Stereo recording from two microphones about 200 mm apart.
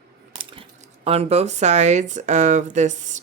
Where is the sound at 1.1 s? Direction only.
30° right (ahead or behind).